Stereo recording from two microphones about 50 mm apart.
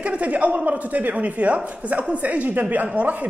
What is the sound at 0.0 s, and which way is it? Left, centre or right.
A man's voice, right.